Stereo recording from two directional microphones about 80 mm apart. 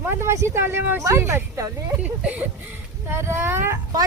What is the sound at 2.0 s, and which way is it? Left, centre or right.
Speech, centre.